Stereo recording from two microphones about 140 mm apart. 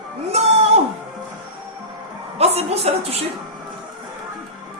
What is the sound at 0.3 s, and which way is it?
Music, 50° right (ahead or behind).